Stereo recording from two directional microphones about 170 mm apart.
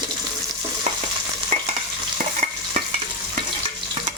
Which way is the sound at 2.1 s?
40° right (ahead or behind).